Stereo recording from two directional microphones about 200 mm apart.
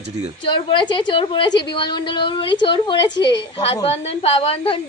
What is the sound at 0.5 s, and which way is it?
A woman's voice, 25° left (ahead or behind).